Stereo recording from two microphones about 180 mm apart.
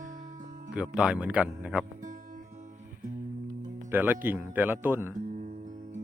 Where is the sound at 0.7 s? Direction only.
5° right (ahead or behind).